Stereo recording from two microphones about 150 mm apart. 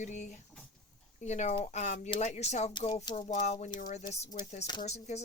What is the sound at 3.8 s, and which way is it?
Speech, 60° left (ahead or behind).